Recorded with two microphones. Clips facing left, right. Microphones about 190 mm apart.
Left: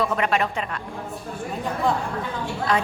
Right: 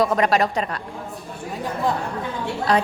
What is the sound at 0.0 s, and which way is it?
Speech, 40° right (ahead or behind).